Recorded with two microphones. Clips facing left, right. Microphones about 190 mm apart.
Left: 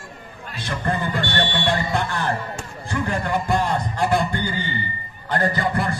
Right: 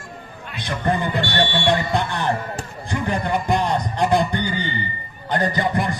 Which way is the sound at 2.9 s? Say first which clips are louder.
Right 1 dB; 20° right (ahead or behind).